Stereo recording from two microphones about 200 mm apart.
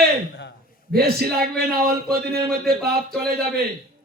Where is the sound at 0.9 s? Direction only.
50° right (ahead or behind).